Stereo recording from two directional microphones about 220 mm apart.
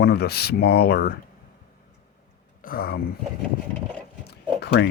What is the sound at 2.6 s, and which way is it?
Speech, 40° left (ahead or behind).